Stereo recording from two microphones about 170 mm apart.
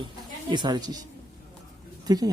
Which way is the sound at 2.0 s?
20° right (ahead or behind).